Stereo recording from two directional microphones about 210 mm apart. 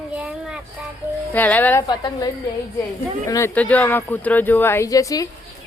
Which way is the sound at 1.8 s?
20° left (ahead or behind).